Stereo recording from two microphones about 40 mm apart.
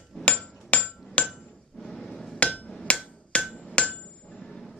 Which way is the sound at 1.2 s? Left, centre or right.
Left.